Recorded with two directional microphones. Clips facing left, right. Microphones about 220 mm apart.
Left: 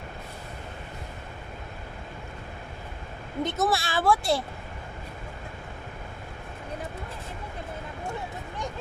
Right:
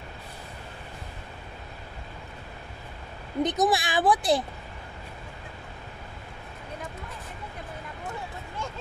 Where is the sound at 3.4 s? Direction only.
15° right (ahead or behind).